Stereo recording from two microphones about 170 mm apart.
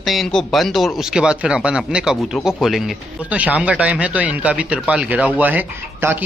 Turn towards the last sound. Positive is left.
turn(degrees=-10)  # may be behind; listen again after turning